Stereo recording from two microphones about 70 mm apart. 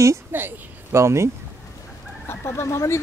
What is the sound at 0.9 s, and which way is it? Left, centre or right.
Speech, right.